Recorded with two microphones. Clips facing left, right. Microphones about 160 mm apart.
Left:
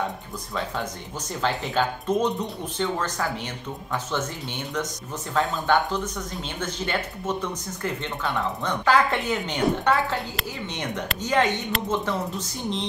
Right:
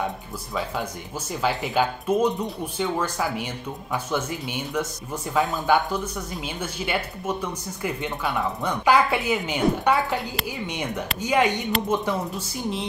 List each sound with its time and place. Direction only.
1.4 s speech: 10° right (ahead or behind)
10.4 s speech: centre (ahead or behind)